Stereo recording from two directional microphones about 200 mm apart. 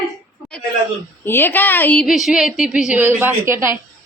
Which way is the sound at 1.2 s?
10° left (ahead or behind).